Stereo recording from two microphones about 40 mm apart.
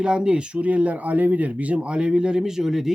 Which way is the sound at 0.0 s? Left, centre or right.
Right.